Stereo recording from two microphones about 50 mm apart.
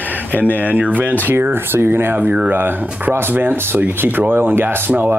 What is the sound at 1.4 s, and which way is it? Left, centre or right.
Speech, right.